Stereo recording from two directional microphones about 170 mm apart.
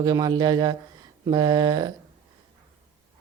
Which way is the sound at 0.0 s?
20° right (ahead or behind).